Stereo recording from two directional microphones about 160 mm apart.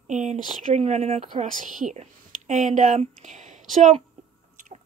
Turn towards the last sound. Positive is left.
turn(degrees=-50)  # may be behind; listen again after turning